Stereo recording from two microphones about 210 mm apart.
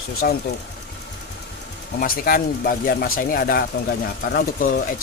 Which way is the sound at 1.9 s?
45° left (ahead or behind).